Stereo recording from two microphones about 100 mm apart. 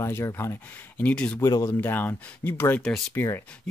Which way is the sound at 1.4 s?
35° left (ahead or behind).